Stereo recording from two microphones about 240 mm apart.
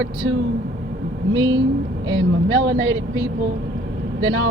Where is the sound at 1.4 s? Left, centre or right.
Right.